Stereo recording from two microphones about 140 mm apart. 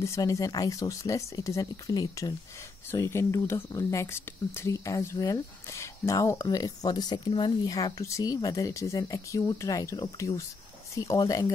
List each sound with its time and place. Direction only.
0.0 s speech: 20° left (ahead or behind)